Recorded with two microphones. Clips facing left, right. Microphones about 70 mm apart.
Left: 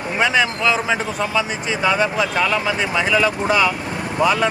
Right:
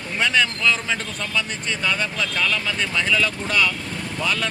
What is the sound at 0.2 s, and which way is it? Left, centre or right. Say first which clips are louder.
Speech: left 3 dB; centre.